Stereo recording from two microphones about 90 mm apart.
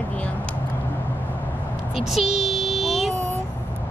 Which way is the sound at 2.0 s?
Centre (ahead or behind).